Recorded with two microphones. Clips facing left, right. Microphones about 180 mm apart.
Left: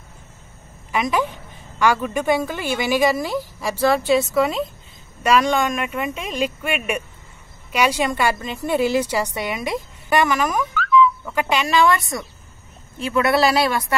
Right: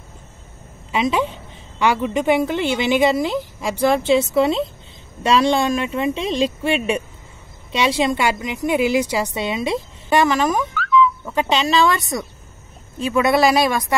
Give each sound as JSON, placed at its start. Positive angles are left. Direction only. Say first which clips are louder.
{"t": 0.9, "sound": "a woman's voice", "louder": "right 2 dB", "side_deg": -25}